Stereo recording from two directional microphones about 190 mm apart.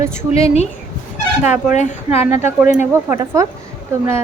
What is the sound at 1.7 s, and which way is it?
Speech, 40° left (ahead or behind).